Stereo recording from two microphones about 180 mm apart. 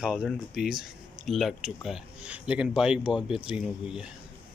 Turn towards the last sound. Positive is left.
turn(degrees=-5)  # may be behind; listen again after turning